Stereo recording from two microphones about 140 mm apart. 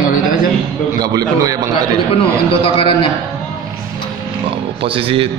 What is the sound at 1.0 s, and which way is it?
Speech, 30° right (ahead or behind).